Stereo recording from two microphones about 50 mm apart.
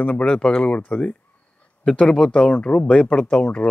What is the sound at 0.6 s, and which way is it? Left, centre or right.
Speech, left.